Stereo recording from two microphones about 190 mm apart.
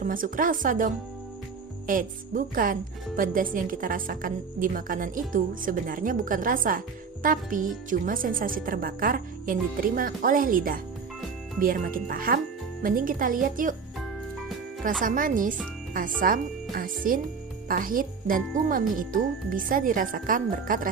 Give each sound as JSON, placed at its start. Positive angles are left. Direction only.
{"t": 0.0, "sound": "a woman's voice", "side_deg": -45}
{"t": 1.9, "sound": "a woman's voice", "side_deg": -45}
{"t": 15.0, "sound": "a woman's voice", "side_deg": -45}